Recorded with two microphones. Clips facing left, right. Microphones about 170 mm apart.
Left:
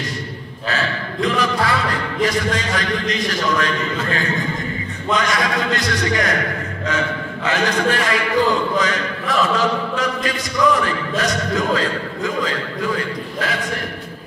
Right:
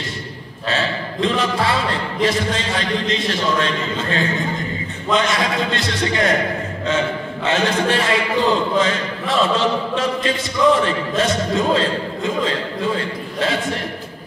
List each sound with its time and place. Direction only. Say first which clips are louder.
0.7 s speech: right 1 dB; 25° right (ahead or behind)
7.4 s speech: right 1 dB; 25° right (ahead or behind)